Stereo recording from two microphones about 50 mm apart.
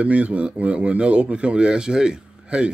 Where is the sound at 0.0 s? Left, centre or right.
Right.